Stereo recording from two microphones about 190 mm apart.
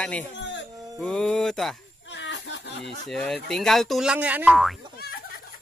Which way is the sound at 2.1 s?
70° left (ahead or behind).